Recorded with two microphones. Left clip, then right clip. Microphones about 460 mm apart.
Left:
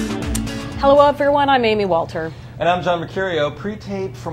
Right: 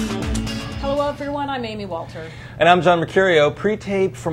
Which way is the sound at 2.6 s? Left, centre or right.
Right.